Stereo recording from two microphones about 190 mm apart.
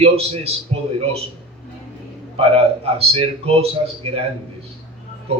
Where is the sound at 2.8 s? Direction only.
30° right (ahead or behind).